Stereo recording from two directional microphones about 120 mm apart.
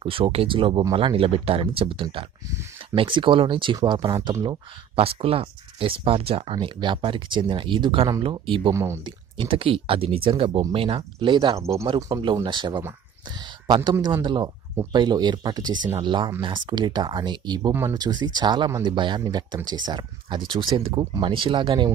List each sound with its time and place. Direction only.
0.0 s speech: 50° right (ahead or behind)
4.9 s speech: 50° right (ahead or behind)
8.7 s speech: 20° right (ahead or behind)
9.0 s speech: 45° right (ahead or behind)
11.5 s speech: 25° right (ahead or behind)
12.1 s speech: 45° right (ahead or behind)